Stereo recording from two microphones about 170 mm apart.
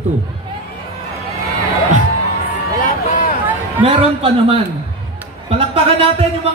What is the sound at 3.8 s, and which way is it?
A man's voice, 35° right (ahead or behind).